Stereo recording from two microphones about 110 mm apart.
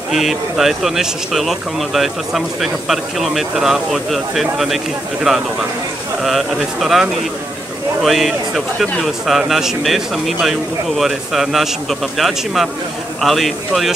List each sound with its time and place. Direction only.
0.1 s speech: centre (ahead or behind)
6.2 s speech: centre (ahead or behind)